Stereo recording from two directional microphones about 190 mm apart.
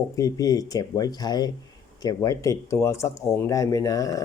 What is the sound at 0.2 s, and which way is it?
Speech, 20° left (ahead or behind).